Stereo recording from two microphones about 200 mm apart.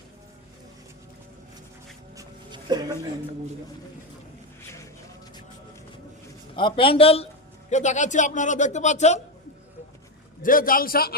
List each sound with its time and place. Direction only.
2.1 s music: 20° right (ahead or behind)
6.6 s a man's voice: 25° left (ahead or behind)
10.4 s a man's voice: 45° left (ahead or behind)